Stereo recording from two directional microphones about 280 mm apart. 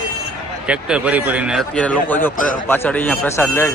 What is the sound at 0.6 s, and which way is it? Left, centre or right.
Speech, centre.